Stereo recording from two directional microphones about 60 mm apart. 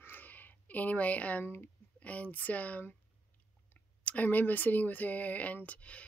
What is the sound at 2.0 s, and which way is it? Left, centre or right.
Speech, left.